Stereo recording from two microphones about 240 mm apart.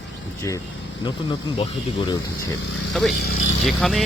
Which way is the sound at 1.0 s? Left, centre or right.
Left.